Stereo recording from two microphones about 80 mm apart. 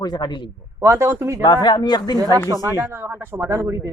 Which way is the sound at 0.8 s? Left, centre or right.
Right.